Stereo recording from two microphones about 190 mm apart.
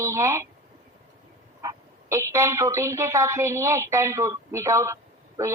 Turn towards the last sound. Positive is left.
turn(degrees=-15)  # may be behind; listen again after turning